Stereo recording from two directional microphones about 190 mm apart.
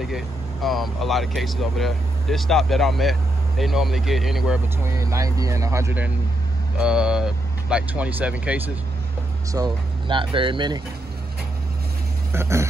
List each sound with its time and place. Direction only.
0.0 s speech: centre (ahead or behind)
4.8 s speech: 15° right (ahead or behind)
9.5 s speech: 20° right (ahead or behind)
12.3 s speech: 15° right (ahead or behind)